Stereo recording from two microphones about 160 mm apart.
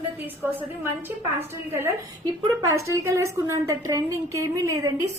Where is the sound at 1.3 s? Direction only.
15° right (ahead or behind).